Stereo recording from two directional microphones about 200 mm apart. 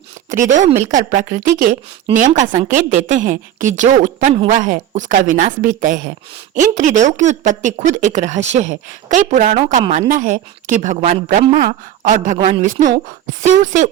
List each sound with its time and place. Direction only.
0.4 s a woman's voice: 40° right (ahead or behind)